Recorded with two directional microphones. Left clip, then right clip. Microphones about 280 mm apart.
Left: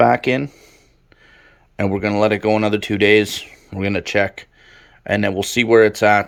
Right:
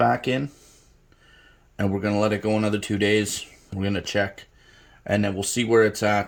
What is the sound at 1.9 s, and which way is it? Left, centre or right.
Speech, left.